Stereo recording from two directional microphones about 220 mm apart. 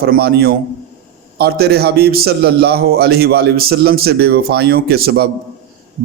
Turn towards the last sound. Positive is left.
turn(degrees=-45)  # may be behind; listen again after turning